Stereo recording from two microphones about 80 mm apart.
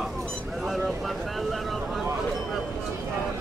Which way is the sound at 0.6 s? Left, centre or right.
Centre.